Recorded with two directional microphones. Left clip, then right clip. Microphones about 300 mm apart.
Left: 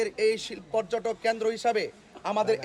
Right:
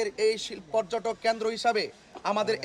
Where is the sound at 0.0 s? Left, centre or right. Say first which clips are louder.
Left 1 dB; centre.